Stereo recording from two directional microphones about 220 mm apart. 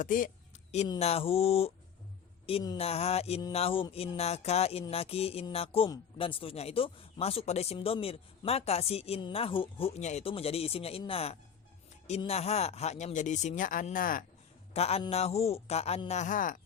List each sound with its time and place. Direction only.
0.0 s a sound: 40° left (ahead or behind)
0.9 s music: 30° left (ahead or behind)
12.0 s speech: 30° left (ahead or behind)
14.7 s music: 30° left (ahead or behind)